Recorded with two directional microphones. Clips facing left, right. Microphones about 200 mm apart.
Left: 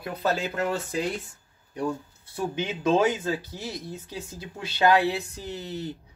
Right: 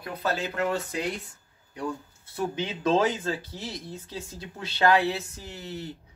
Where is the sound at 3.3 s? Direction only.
25° right (ahead or behind).